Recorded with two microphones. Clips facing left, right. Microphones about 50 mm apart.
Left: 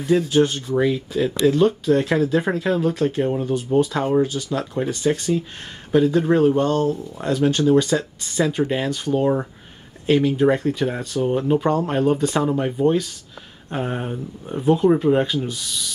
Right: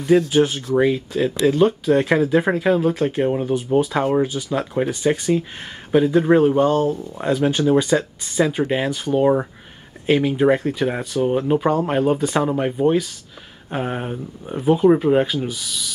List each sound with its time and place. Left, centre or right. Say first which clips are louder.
0.3 s speech: right 1 dB; centre
0.7 s speech: right 2 dB; centre
1.1 s speech: even; centre